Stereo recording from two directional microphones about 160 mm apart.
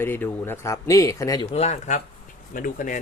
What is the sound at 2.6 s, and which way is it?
Speech, 60° left (ahead or behind).